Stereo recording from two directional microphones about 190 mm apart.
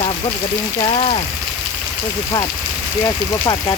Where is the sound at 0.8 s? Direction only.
30° left (ahead or behind).